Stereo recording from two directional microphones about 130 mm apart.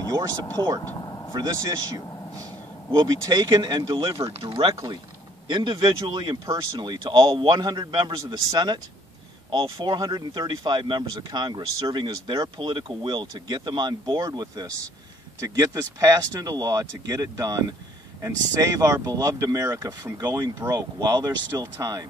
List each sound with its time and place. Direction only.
0.9 s vehicle: 30° left (ahead or behind)
1.3 s speech: 30° right (ahead or behind)
2.9 s speech: 30° right (ahead or behind)
4.2 s speech: 45° right (ahead or behind)
5.5 s speech: 35° right (ahead or behind)